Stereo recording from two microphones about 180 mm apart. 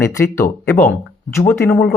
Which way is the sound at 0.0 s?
15° left (ahead or behind).